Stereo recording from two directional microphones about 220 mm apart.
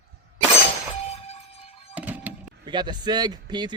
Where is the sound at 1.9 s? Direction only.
5° right (ahead or behind).